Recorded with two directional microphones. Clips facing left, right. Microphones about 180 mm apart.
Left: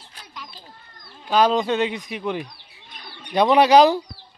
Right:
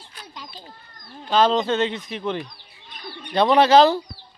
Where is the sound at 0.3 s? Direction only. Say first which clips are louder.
Even; 25° right (ahead or behind).